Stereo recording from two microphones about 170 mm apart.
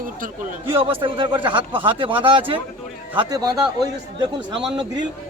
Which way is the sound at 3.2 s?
25° right (ahead or behind).